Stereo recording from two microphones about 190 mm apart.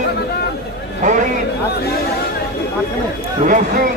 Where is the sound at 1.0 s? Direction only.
40° right (ahead or behind).